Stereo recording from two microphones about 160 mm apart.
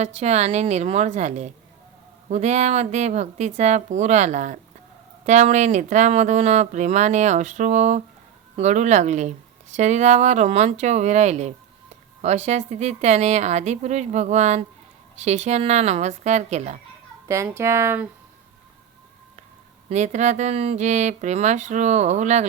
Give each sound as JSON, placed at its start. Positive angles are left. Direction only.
{"t": 0.0, "sound": "speech", "side_deg": -45}
{"t": 17.2, "sound": "speech", "side_deg": -20}
{"t": 19.9, "sound": "speech", "side_deg": -45}